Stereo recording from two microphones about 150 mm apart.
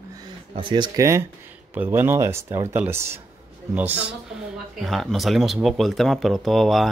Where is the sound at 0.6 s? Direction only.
30° right (ahead or behind).